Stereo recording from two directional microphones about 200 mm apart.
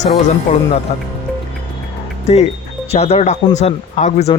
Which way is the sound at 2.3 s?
30° left (ahead or behind).